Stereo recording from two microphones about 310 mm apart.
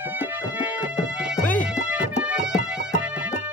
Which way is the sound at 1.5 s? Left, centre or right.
Centre.